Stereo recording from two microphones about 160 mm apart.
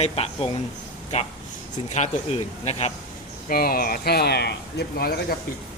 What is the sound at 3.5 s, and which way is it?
Speech, 65° left (ahead or behind).